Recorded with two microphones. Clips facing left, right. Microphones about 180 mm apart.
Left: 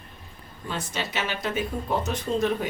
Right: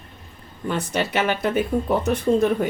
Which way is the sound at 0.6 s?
60° right (ahead or behind).